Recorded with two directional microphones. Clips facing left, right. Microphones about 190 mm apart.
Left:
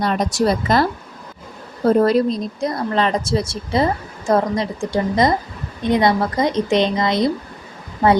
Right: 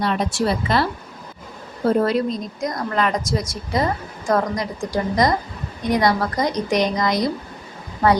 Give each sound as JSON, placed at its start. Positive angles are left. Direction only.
{"t": 0.0, "sound": "speech", "side_deg": 40}
{"t": 2.0, "sound": "speech", "side_deg": 35}